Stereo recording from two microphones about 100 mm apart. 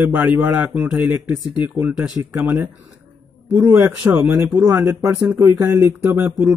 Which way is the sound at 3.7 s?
35° right (ahead or behind).